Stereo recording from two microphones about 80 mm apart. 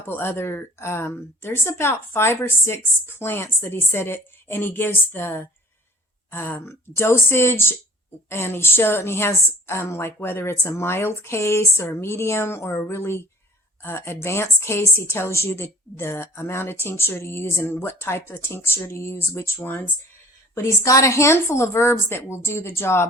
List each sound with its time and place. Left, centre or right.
0.0 s a woman's voice: left
20.6 s a woman's voice: left